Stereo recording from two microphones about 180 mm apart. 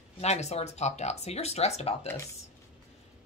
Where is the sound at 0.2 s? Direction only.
35° left (ahead or behind).